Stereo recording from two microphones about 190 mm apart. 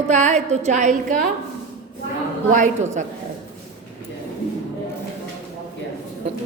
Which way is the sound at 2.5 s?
40° right (ahead or behind).